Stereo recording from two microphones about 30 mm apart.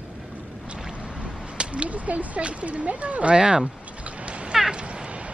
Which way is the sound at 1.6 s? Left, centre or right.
Right.